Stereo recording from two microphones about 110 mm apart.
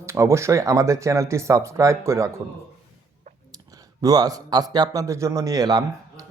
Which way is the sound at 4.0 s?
35° right (ahead or behind).